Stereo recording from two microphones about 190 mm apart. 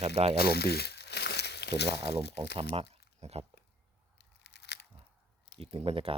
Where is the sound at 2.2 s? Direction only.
60° left (ahead or behind).